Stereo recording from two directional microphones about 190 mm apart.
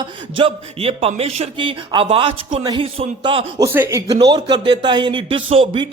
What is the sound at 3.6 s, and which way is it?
Speech, 15° right (ahead or behind).